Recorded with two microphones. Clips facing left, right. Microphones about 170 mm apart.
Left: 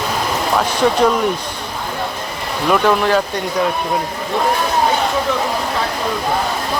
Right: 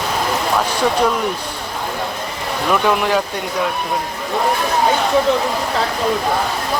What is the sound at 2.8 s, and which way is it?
Speech, 10° right (ahead or behind).